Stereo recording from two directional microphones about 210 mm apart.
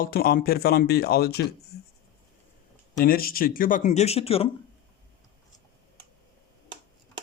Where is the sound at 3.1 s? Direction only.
45° left (ahead or behind); by 4.5 s 30° left (ahead or behind).